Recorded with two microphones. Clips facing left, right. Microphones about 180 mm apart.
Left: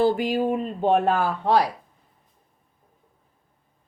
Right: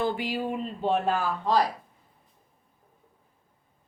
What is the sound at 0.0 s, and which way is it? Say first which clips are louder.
Speech: left 7 dB; 40° left (ahead or behind).